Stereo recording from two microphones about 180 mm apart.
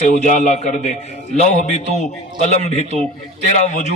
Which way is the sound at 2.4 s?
40° left (ahead or behind).